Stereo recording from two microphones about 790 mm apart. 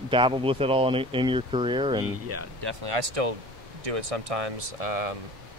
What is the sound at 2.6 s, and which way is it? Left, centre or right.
Speech, right.